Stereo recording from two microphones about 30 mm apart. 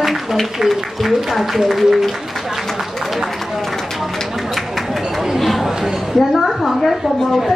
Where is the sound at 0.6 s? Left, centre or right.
Centre.